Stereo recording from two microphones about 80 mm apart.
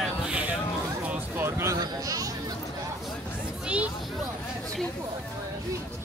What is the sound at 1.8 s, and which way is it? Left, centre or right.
Speech, right.